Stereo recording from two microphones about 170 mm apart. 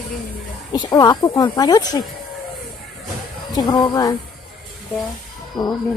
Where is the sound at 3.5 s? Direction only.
25° left (ahead or behind).